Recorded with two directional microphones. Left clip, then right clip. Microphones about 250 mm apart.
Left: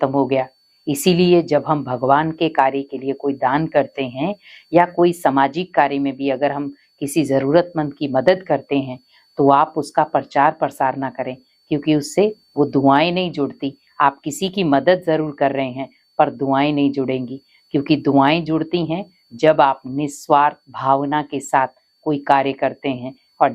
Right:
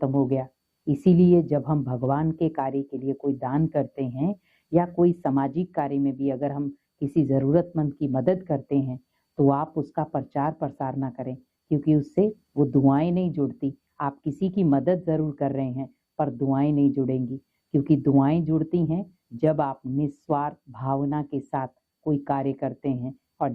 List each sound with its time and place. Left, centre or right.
0.3 s speech: centre
12.5 s speech: left
12.9 s speech: centre